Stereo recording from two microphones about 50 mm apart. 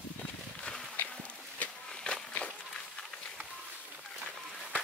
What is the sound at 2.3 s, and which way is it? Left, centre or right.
Run, centre.